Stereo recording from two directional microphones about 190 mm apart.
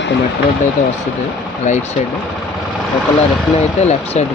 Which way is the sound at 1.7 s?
35° left (ahead or behind).